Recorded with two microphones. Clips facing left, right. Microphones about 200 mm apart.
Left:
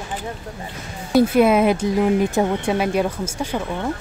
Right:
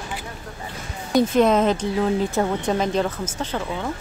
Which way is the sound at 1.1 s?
10° left (ahead or behind).